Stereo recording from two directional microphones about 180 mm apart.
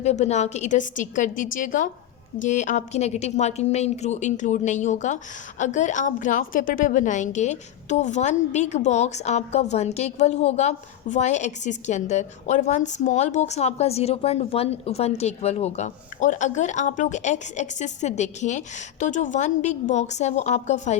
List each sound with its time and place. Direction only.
0.0 s a woman's voice: 35° left (ahead or behind)